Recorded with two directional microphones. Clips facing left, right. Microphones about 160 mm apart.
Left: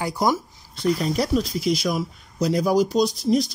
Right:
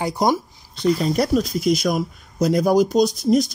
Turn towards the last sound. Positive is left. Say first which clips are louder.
# right 3 dB
turn(degrees=-45)  # may be behind; listen again after turning